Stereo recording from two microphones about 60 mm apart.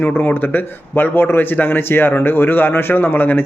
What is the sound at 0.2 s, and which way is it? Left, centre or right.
A man's voice, left.